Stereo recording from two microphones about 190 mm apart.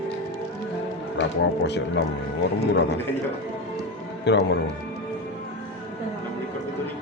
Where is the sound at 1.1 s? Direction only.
70° left (ahead or behind).